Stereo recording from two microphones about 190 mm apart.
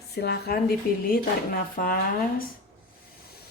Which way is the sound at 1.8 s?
45° left (ahead or behind).